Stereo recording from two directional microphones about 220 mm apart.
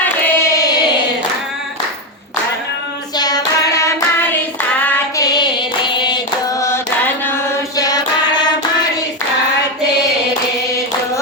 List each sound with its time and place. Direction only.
0.0 s hands: 15° left (ahead or behind)
3.2 s child singing: 15° left (ahead or behind)
4.8 s female singing: 10° left (ahead or behind)